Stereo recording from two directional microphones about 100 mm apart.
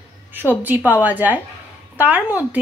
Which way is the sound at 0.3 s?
20° right (ahead or behind).